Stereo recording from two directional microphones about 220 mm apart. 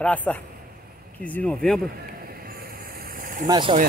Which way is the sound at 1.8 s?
45° right (ahead or behind).